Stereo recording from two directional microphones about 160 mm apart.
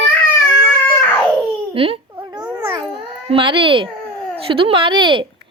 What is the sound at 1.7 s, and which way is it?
Speech, 35° right (ahead or behind).